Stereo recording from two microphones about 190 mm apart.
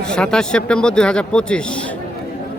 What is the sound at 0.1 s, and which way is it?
Speech, 5° left (ahead or behind).